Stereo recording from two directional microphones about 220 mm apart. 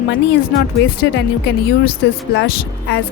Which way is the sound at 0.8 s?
50° left (ahead or behind).